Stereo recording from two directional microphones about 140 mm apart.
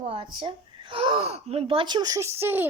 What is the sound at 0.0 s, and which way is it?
Speech, 40° right (ahead or behind).